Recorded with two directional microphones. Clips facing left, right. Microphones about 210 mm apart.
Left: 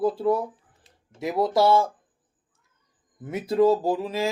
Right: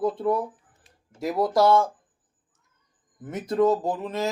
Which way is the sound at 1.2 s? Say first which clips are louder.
Even; centre (ahead or behind).